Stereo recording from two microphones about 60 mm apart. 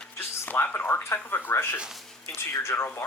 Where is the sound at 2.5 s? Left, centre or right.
Left.